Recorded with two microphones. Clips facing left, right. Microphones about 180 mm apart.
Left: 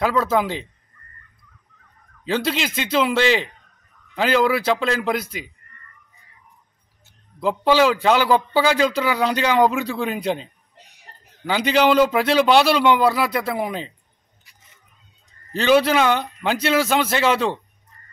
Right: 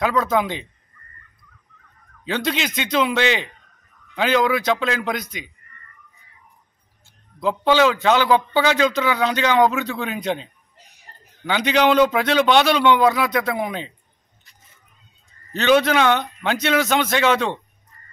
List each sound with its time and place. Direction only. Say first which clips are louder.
0.0 s a man's voice: even; 5° left (ahead or behind)
2.2 s a man's voice: left 1 dB; 5° left (ahead or behind)
7.3 s a man's voice: even; 5° left (ahead or behind)
15.5 s a man's voice: even; 5° left (ahead or behind)